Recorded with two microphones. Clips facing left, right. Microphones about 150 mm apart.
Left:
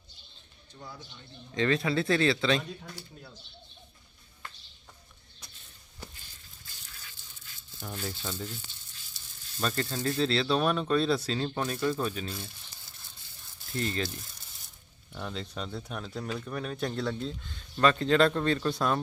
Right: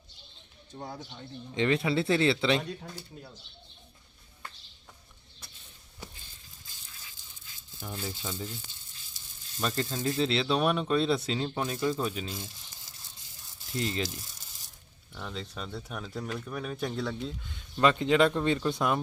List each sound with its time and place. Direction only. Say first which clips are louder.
0.8 s speech: right 5 dB; 45° right (ahead or behind)
1.5 s speech: even; 20° right (ahead or behind)
7.9 s speech: even; 10° right (ahead or behind)
9.6 s speech: even; 15° right (ahead or behind)
13.7 s speech: even; 20° right (ahead or behind)
15.1 s speech: left 2 dB; centre (ahead or behind); by 18.9 s 15° right (ahead or behind)